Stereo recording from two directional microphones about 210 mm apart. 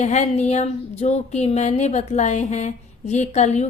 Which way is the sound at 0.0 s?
35° left (ahead or behind).